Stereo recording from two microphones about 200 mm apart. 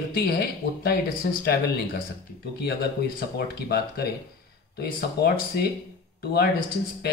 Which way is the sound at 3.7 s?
50° left (ahead or behind).